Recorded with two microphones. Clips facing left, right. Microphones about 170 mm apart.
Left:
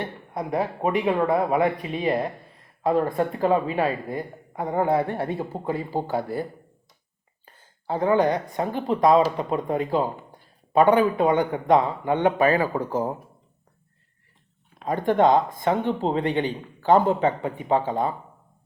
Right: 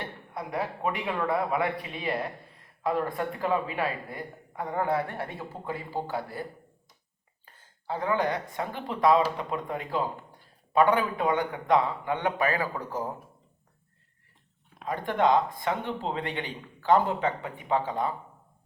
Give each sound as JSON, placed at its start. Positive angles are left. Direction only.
{"t": 0.0, "sound": "a man's voice", "side_deg": 40}
{"t": 7.9, "sound": "a man's voice", "side_deg": 30}
{"t": 11.3, "sound": "a man's voice", "side_deg": 35}
{"t": 14.8, "sound": "speech", "side_deg": 40}